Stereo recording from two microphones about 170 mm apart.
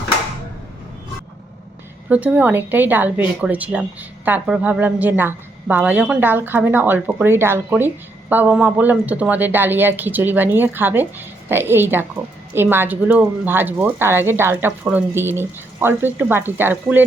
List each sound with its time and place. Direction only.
2.0 s a woman's voice: 10° right (ahead or behind)